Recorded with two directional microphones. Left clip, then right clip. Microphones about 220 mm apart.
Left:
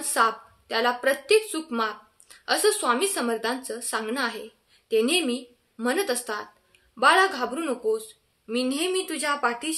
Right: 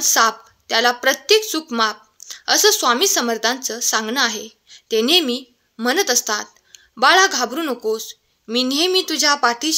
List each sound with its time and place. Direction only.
0.1 s speech: 40° right (ahead or behind)